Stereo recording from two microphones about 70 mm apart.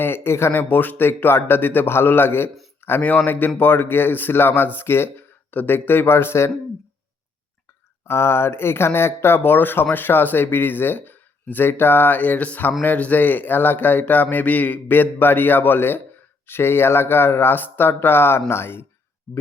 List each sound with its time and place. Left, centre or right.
0.0 s speech: left
3.0 s a man's voice: left
8.0 s a man's voice: left